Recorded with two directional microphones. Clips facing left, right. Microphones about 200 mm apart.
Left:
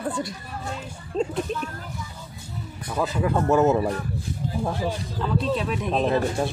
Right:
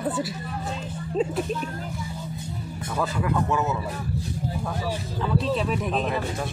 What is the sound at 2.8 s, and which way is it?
Speech, 20° left (ahead or behind).